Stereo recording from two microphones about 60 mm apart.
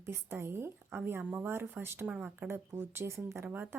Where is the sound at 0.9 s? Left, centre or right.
Right.